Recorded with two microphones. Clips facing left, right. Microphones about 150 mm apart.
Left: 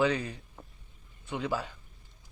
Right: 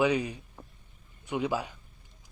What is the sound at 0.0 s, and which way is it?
A man's voice, 15° right (ahead or behind).